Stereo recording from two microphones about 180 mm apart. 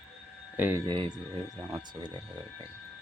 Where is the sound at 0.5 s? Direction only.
10° right (ahead or behind).